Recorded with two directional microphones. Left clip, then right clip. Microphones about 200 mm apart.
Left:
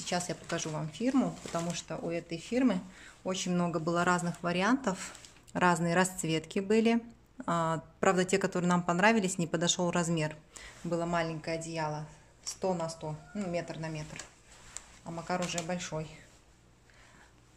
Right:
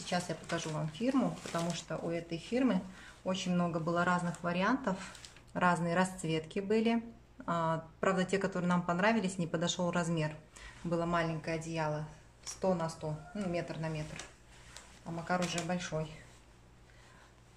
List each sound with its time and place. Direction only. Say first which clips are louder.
0.0 s speech: left 2 dB; 50° left (ahead or behind)
15.7 s speech: even; 45° left (ahead or behind)